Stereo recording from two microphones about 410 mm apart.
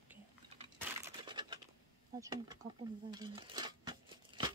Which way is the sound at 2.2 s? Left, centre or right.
Centre.